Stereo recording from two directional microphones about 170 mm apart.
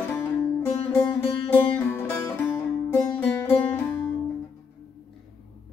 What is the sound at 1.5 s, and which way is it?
Music, 15° left (ahead or behind).